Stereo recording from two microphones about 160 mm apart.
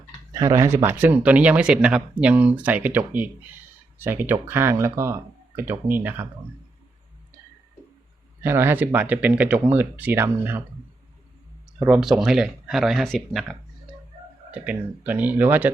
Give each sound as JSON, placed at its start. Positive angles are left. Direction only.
{"t": 0.3, "sound": "speech", "side_deg": -20}
{"t": 8.4, "sound": "speech", "side_deg": -15}
{"t": 11.9, "sound": "speech", "side_deg": 0}